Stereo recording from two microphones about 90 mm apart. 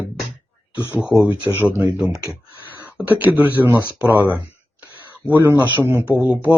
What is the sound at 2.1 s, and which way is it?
Speech, 40° right (ahead or behind).